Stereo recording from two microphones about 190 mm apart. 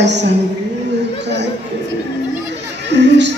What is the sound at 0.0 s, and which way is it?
Speech, 65° right (ahead or behind).